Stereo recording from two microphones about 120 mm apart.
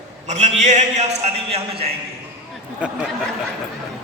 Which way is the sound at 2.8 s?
10° right (ahead or behind).